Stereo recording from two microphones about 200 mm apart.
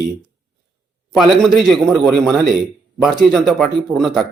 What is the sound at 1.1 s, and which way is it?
A man's voice, centre (ahead or behind).